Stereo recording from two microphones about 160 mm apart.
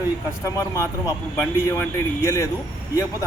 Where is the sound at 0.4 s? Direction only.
20° left (ahead or behind).